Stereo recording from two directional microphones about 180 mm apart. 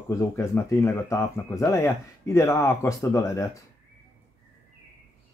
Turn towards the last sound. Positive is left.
turn(degrees=15)  # may be behind; listen again after turning